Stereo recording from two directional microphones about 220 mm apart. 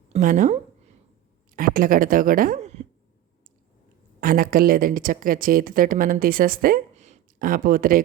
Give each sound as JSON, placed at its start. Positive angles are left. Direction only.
{"t": 0.1, "sound": "speech", "side_deg": -35}
{"t": 4.2, "sound": "speech", "side_deg": -40}